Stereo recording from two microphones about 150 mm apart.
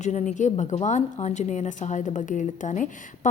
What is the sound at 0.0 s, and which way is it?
A woman's voice, 50° left (ahead or behind).